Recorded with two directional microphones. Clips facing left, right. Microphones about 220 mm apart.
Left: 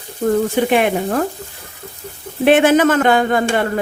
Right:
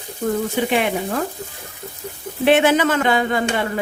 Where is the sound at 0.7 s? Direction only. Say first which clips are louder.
Left 5 dB; 50° left (ahead or behind).